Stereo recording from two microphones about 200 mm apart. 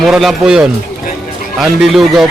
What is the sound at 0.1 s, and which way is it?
A man's voice, centre (ahead or behind).